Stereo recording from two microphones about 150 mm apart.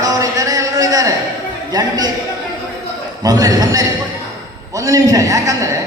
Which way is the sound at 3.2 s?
25° right (ahead or behind).